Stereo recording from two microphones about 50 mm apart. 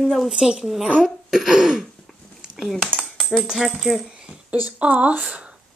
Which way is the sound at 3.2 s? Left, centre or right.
Centre.